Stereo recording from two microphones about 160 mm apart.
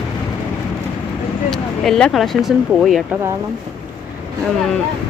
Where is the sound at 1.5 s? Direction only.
5° left (ahead or behind).